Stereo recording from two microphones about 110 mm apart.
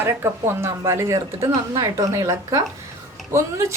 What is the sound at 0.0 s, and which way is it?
A woman's voice, 20° right (ahead or behind).